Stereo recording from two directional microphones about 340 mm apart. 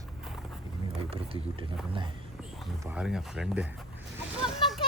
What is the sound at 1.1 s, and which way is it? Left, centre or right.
Speech, centre.